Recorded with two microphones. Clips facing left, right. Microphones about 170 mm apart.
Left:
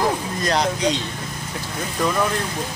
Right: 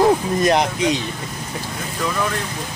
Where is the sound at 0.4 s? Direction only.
20° right (ahead or behind).